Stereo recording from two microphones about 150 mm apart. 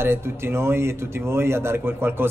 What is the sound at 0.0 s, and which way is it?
Speech, 15° right (ahead or behind).